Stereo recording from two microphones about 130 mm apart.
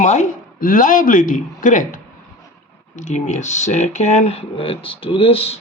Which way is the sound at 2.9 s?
65° left (ahead or behind).